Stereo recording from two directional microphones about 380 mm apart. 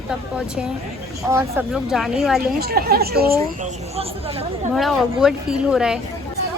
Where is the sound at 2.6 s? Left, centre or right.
Right.